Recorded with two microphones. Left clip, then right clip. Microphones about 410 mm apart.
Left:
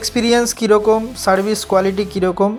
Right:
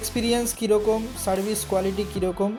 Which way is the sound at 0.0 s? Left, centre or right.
Right.